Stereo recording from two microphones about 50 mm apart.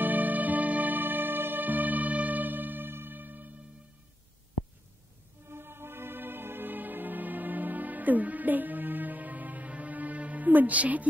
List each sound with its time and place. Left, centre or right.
0.0 s music: right
5.5 s music: right